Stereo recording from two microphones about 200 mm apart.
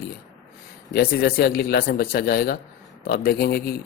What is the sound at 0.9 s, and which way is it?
Speech, 50° left (ahead or behind).